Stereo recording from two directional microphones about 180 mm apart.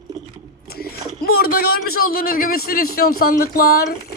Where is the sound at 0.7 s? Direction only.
60° left (ahead or behind).